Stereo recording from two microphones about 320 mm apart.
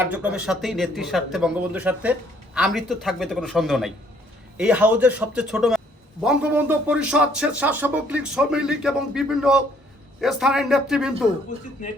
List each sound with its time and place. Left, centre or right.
0.0 s speech: centre